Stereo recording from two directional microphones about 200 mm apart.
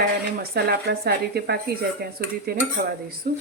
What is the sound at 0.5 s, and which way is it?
Speech, 50° right (ahead or behind).